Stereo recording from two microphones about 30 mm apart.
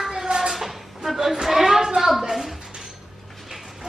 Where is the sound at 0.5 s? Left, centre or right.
Centre.